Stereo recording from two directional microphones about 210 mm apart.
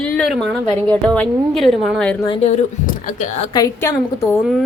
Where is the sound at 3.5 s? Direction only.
15° left (ahead or behind).